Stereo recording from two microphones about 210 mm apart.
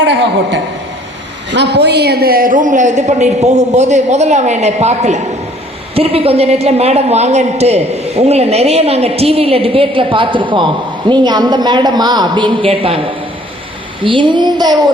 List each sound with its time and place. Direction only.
0.0 s a woman's voice: 60° right (ahead or behind); by 14.8 s 20° right (ahead or behind)